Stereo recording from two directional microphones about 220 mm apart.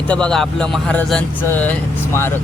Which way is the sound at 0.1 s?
5° left (ahead or behind).